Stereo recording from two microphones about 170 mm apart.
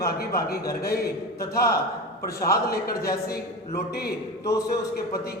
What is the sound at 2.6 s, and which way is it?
Speech, 60° left (ahead or behind).